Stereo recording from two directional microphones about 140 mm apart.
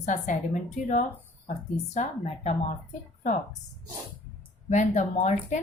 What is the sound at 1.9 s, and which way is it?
Speech, 50° left (ahead or behind).